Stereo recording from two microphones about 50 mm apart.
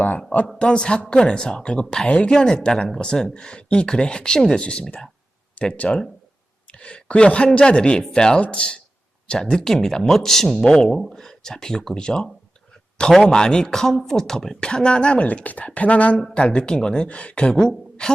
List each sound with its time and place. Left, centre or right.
0.6 s a woman's voice: centre
4.5 s a woman's voice: left
9.4 s a woman's voice: centre